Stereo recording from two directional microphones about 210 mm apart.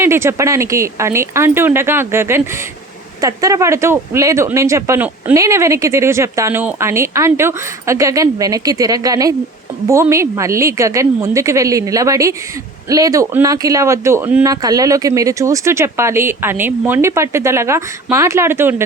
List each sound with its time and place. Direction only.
0.0 s speech: 10° right (ahead or behind)